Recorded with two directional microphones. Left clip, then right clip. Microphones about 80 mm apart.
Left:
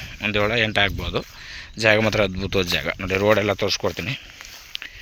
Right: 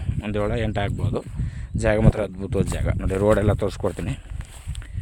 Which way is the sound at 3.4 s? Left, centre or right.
Right.